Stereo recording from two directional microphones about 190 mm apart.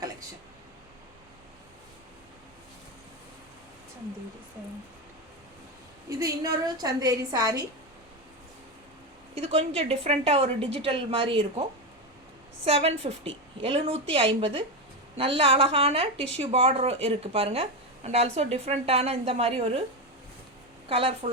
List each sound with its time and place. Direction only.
6.1 s a woman's voice: 15° right (ahead or behind)
9.3 s a woman's voice: 35° right (ahead or behind)
12.6 s a woman's voice: 30° right (ahead or behind)
20.9 s a woman's voice: 30° right (ahead or behind)